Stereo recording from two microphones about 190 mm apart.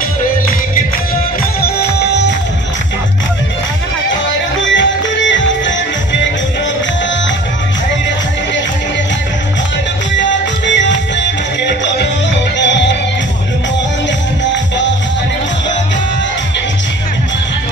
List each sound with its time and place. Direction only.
1.6 s music: 55° left (ahead or behind)
4.6 s music: 75° left (ahead or behind)
11.6 s music: 65° left (ahead or behind)